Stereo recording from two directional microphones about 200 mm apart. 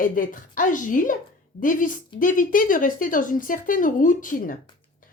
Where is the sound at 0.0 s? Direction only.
45° left (ahead or behind).